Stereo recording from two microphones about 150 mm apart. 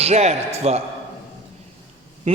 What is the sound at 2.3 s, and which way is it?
Speech, 40° right (ahead or behind).